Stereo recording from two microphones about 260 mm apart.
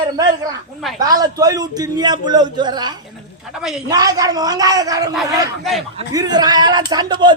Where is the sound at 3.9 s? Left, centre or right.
Centre.